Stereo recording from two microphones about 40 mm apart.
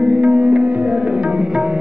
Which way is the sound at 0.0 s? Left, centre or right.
Right.